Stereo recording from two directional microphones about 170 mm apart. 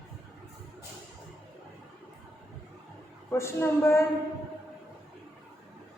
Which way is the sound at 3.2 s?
15° left (ahead or behind).